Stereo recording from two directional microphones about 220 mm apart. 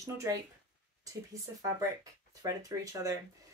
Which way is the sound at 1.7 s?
15° right (ahead or behind).